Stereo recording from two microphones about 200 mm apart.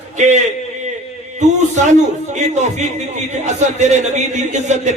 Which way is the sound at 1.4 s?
35° right (ahead or behind).